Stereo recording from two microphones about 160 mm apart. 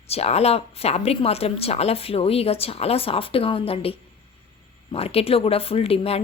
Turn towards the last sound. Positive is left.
turn(degrees=40)  # may be behind; listen again after turning